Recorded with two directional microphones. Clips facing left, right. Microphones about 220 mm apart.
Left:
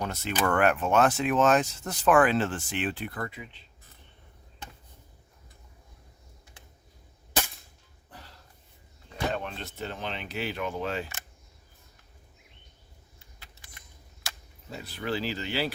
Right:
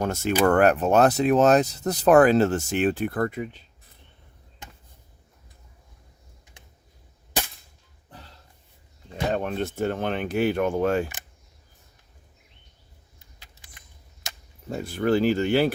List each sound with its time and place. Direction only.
0.0 s speech: 45° right (ahead or behind)
9.3 s speech: 50° right (ahead or behind)
14.7 s speech: 50° right (ahead or behind)